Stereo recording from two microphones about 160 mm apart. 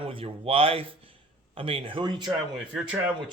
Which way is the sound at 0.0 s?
35° right (ahead or behind).